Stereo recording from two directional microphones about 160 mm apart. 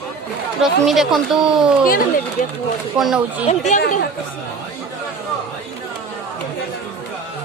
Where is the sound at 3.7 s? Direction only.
60° left (ahead or behind).